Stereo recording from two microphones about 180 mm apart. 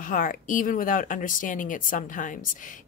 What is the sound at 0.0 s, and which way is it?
Speech, 50° left (ahead or behind).